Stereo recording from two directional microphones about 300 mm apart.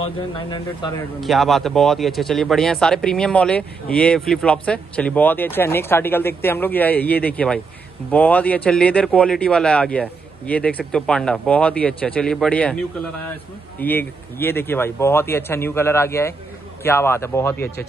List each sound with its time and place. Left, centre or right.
1.2 s speech: centre